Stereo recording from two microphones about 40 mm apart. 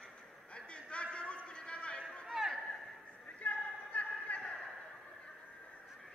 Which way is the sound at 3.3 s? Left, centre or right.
Left.